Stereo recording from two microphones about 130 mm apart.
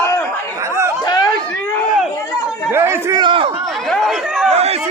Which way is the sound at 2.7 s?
20° right (ahead or behind).